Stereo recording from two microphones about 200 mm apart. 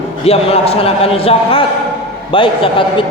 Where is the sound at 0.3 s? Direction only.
30° left (ahead or behind).